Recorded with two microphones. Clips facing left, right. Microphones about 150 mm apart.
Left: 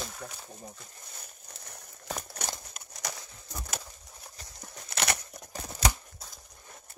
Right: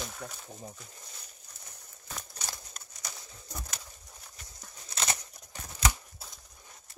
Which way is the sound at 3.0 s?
75° left (ahead or behind).